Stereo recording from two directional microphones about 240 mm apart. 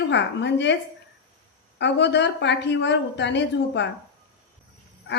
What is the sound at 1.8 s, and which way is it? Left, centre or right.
A woman's voice, left.